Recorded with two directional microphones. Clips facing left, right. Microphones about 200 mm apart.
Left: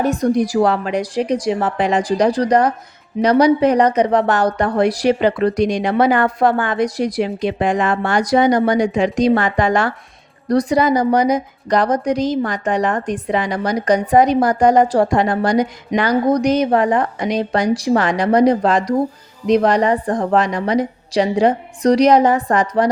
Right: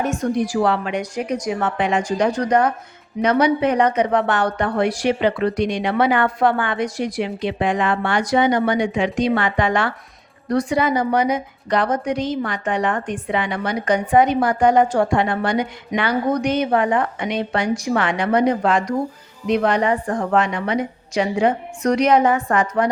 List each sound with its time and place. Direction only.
0.0 s speech: 35° left (ahead or behind)